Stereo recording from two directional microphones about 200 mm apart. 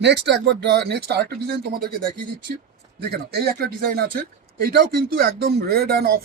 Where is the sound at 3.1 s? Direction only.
50° right (ahead or behind).